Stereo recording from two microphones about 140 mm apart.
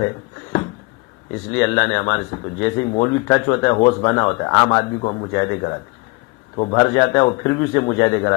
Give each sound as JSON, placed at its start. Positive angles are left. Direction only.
{"t": 0.0, "sound": "a sound", "side_deg": 25}
{"t": 1.5, "sound": "a man's voice", "side_deg": 20}
{"t": 6.5, "sound": "a man's voice", "side_deg": 35}
{"t": 6.8, "sound": "a man's voice", "side_deg": 20}